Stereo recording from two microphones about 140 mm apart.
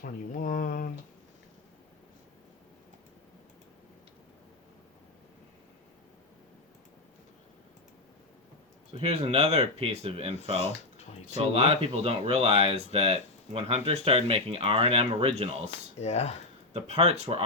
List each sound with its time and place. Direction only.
0.0 s speech: 80° left
8.9 s speech: 45° right (ahead or behind)
16.0 s speech: 50° left (ahead or behind)
16.9 s speech: 50° right (ahead or behind)